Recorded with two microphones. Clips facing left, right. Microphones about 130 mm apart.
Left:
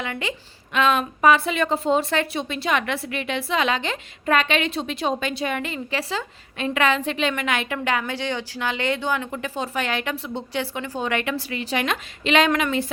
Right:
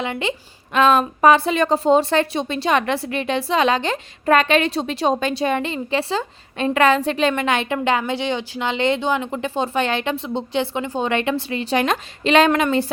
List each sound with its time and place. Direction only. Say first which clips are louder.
0.0 s a woman's voice: right 5 dB; 25° right (ahead or behind)
0.7 s a woman's voice: right 5 dB; 35° right (ahead or behind)